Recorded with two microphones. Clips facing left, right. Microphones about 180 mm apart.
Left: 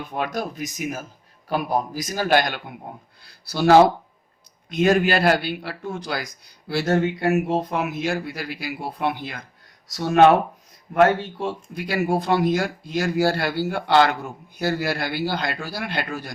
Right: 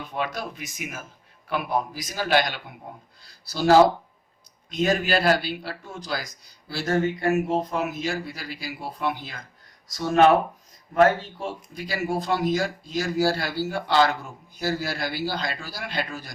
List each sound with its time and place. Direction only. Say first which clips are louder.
0.3 s a man's voice: left 6 dB; 40° left (ahead or behind)
3.4 s speech: left 2 dB; 60° left (ahead or behind)